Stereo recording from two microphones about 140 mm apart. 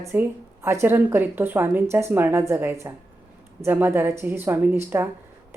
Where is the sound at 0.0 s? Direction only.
15° right (ahead or behind).